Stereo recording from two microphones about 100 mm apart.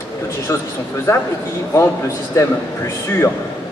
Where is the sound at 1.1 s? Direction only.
30° left (ahead or behind).